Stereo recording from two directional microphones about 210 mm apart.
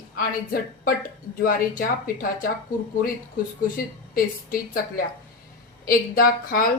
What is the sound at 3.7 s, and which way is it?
Speech, 45° left (ahead or behind).